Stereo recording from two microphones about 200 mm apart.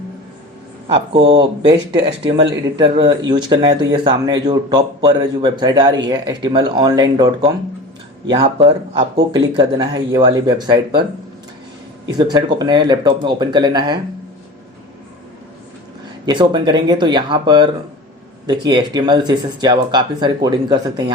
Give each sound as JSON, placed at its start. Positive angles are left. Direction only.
{"t": 0.9, "sound": "speech", "side_deg": -25}
{"t": 12.1, "sound": "speech", "side_deg": -20}
{"t": 16.2, "sound": "speech", "side_deg": -20}